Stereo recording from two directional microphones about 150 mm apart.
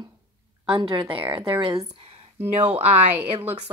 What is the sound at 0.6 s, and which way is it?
Speech, 35° right (ahead or behind).